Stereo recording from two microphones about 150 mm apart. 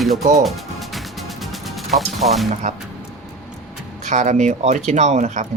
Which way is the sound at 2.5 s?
55° right (ahead or behind).